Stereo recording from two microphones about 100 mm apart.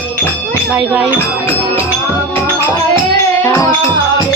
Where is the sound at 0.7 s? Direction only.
10° right (ahead or behind).